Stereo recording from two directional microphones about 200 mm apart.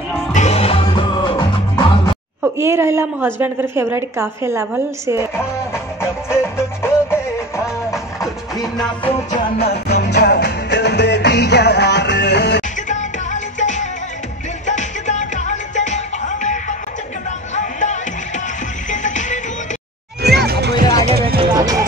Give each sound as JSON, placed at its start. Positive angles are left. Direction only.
{"t": 0.3, "sound": "music", "side_deg": 35}
{"t": 2.4, "sound": "a woman's voice", "side_deg": -10}
{"t": 6.3, "sound": "music", "side_deg": 10}
{"t": 9.6, "sound": "music", "side_deg": 55}
{"t": 12.8, "sound": "music", "side_deg": 40}
{"t": 20.2, "sound": "music", "side_deg": -55}
{"t": 21.4, "sound": "music", "side_deg": -20}